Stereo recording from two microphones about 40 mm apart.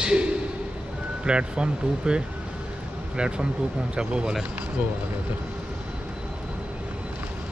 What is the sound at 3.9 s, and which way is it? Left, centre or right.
Speech, right.